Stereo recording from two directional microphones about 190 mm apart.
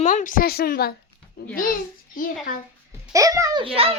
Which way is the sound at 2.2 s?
45° left (ahead or behind).